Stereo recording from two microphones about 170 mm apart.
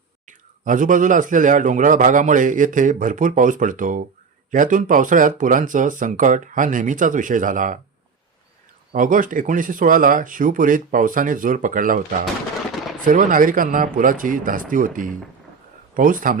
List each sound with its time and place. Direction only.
0.3 s speech: 50° right (ahead or behind)
9.0 s speech: 50° right (ahead or behind)
13.1 s speech: 50° right (ahead or behind)